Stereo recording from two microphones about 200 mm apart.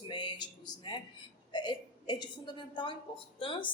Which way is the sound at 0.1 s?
25° left (ahead or behind).